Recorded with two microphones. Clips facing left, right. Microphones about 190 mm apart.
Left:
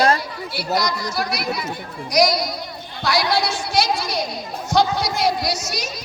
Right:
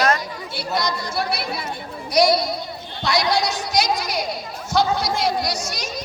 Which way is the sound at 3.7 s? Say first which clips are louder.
Left 1 dB; 15° right (ahead or behind).